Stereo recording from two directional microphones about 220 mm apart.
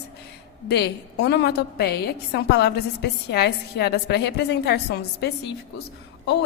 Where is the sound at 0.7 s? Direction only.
50° left (ahead or behind).